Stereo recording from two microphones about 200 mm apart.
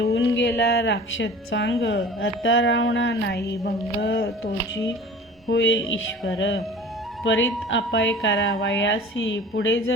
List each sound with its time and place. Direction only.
0.0 s a woman's voice: 60° left (ahead or behind)
5.5 s speech: 65° left (ahead or behind)